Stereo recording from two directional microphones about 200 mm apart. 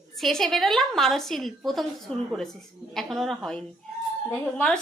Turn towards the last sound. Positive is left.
turn(degrees=5)  # may be behind; listen again after turning